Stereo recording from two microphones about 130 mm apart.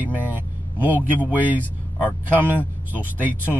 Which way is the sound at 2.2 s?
15° right (ahead or behind).